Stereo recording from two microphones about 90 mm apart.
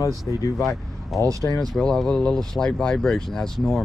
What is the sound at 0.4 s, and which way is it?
Speech, 40° left (ahead or behind).